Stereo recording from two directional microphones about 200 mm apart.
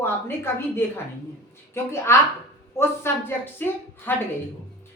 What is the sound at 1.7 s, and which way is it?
Speech, 15° left (ahead or behind).